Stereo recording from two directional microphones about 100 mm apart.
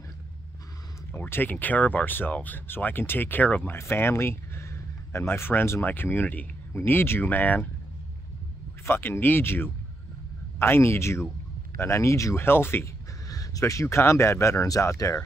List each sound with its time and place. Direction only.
1.1 s speech: 20° left (ahead or behind)
8.8 s speech: 20° left (ahead or behind)
13.3 s speech: 35° left (ahead or behind)